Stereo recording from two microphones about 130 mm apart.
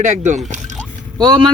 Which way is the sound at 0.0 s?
65° right (ahead or behind).